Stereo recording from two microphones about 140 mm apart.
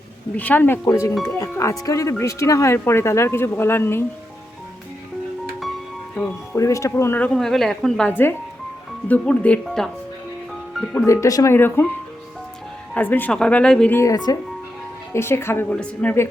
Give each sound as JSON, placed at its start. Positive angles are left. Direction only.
{"t": 0.3, "sound": "a woman's voice", "side_deg": 10}
{"t": 0.9, "sound": "speech", "side_deg": 25}
{"t": 1.1, "sound": "speech", "side_deg": 5}
{"t": 1.4, "sound": "speech", "side_deg": 25}
{"t": 6.6, "sound": "a woman's voice", "side_deg": 20}
{"t": 10.9, "sound": "speech", "side_deg": 20}
{"t": 12.9, "sound": "a woman's voice", "side_deg": 10}
{"t": 13.9, "sound": "a woman's voice", "side_deg": 25}